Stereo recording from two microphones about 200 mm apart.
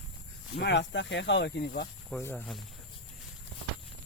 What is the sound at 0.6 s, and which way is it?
Speech, 60° left (ahead or behind).